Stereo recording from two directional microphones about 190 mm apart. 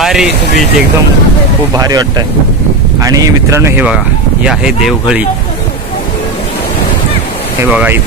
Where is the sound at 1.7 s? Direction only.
20° right (ahead or behind).